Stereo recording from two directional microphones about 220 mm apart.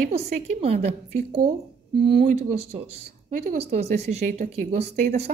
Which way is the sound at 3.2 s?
30° right (ahead or behind).